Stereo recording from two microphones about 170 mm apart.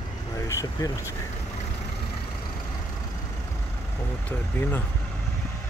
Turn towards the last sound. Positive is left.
turn(degrees=10)  # may be behind; listen again after turning